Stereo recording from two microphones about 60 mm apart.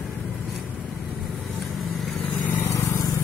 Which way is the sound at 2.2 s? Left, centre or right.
Left.